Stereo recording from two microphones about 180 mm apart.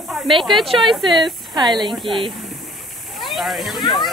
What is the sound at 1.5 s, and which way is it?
Speech, 25° right (ahead or behind).